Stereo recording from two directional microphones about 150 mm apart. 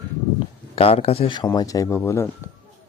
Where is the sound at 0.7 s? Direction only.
40° left (ahead or behind).